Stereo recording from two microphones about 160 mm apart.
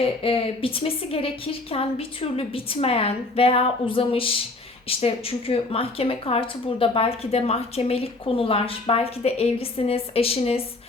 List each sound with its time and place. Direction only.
0.2 s speech: 35° left (ahead or behind)